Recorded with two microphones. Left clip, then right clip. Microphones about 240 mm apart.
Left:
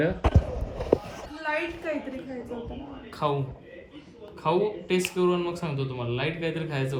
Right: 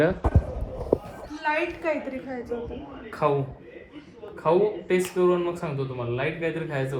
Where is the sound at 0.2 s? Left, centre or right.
Right.